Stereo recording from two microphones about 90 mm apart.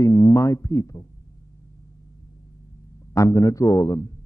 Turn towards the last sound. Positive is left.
turn(degrees=40)  # may be behind; listen again after turning